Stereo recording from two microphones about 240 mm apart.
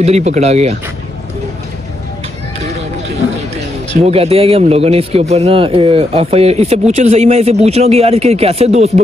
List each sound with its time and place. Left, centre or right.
0.0 s speech: right
4.0 s speech: right